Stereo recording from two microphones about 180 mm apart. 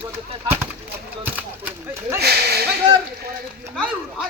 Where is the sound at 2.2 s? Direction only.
65° right (ahead or behind).